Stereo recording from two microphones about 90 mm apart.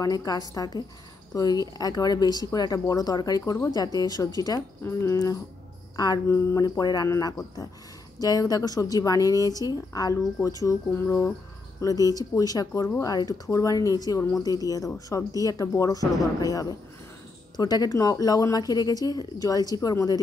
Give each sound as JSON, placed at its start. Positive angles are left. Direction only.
{"t": 0.0, "sound": "speech", "side_deg": 40}
{"t": 4.8, "sound": "speech", "side_deg": 35}
{"t": 6.2, "sound": "speech", "side_deg": 30}
{"t": 6.8, "sound": "speech", "side_deg": 45}
{"t": 11.1, "sound": "speech", "side_deg": 30}
{"t": 11.8, "sound": "speech", "side_deg": 40}